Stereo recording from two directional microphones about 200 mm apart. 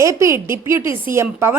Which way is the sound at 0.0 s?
15° right (ahead or behind).